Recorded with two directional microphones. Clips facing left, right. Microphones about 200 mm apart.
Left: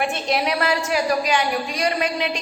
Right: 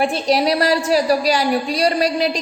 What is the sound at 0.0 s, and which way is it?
A woman's voice, 35° right (ahead or behind).